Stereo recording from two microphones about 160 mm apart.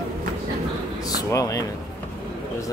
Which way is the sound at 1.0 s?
25° left (ahead or behind).